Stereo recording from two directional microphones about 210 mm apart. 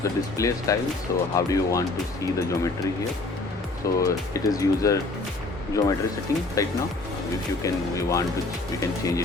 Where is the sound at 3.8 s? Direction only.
15° left (ahead or behind).